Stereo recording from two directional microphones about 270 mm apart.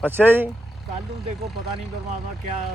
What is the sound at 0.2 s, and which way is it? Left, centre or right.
Speech, centre.